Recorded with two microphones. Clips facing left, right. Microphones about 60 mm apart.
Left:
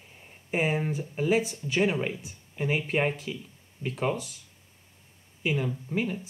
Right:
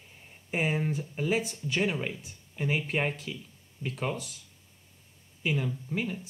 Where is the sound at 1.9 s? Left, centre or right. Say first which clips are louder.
Left 4 dB; centre.